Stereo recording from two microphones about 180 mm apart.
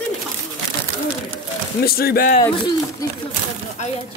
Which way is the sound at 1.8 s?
60° left (ahead or behind).